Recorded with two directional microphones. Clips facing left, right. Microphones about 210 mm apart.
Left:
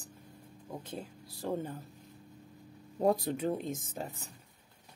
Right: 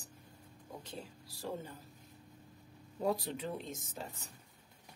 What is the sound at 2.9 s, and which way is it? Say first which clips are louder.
Speech: left 6 dB; 50° left (ahead or behind).